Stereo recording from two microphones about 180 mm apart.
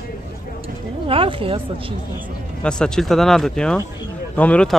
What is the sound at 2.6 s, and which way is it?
Speech, 5° left (ahead or behind).